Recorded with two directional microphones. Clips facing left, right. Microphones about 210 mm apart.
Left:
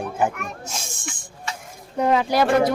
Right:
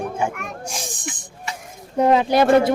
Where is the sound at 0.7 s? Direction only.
15° right (ahead or behind).